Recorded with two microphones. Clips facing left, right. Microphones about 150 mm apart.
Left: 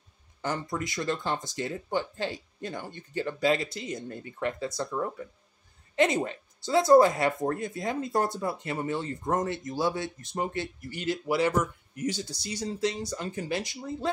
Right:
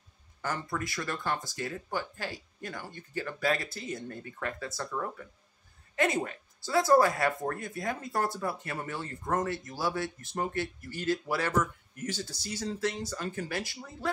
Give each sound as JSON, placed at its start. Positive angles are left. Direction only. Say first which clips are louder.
{"t": 0.4, "sound": "speech", "louder": "left 3 dB", "side_deg": 20}